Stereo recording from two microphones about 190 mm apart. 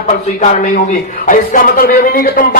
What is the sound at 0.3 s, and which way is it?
A man's voice, 40° left (ahead or behind).